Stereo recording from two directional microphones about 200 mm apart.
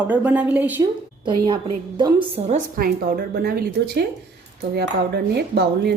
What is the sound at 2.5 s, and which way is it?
Speech, 45° right (ahead or behind).